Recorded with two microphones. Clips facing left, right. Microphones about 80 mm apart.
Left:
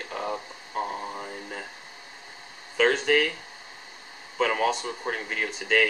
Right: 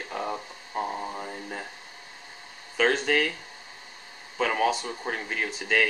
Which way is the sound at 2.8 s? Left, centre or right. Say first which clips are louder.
Left 2 dB; centre.